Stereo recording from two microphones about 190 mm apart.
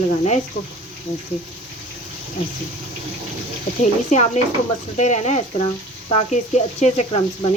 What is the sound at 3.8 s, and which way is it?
Speech, 40° left (ahead or behind).